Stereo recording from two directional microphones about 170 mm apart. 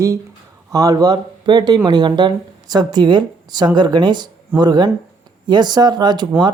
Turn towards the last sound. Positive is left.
turn(degrees=-25)  # may be behind; listen again after turning